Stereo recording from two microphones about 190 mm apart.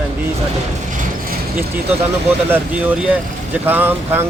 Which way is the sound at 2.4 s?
10° right (ahead or behind).